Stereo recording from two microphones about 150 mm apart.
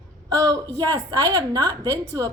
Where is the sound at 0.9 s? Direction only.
25° right (ahead or behind).